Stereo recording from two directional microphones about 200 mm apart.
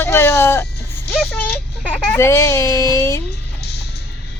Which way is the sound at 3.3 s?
55° left (ahead or behind).